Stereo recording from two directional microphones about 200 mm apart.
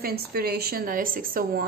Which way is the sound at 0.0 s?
50° right (ahead or behind).